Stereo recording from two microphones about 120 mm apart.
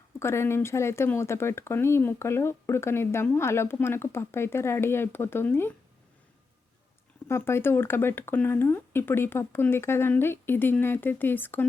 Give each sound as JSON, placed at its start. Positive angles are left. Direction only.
{"t": 0.2, "sound": "speech", "side_deg": 20}
{"t": 7.3, "sound": "speech", "side_deg": 20}